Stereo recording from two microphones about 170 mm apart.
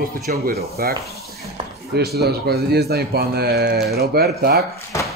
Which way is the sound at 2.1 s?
70° right (ahead or behind).